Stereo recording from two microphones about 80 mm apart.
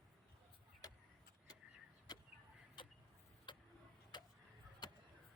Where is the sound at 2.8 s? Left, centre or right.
Left.